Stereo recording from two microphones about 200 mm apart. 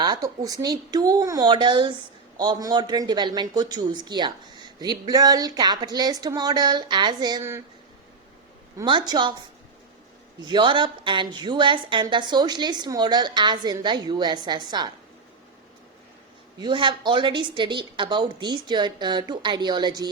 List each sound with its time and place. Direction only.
0.0 s a woman's voice: 20° right (ahead or behind)
8.8 s a woman's voice: 20° right (ahead or behind)
10.4 s a woman's voice: 25° right (ahead or behind)
16.6 s a woman's voice: 25° right (ahead or behind)